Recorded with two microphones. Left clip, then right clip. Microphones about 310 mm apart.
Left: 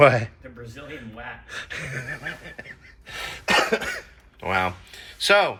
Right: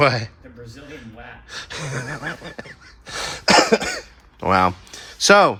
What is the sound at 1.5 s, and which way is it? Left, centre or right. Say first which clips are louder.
Speech: right 4 dB; centre.